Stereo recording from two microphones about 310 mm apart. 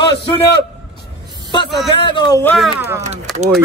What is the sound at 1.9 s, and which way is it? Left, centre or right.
Speech, centre.